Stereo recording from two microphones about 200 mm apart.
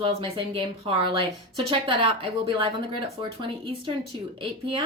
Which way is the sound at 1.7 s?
25° right (ahead or behind).